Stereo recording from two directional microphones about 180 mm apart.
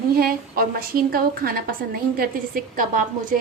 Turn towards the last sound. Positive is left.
turn(degrees=-50)  # may be behind; listen again after turning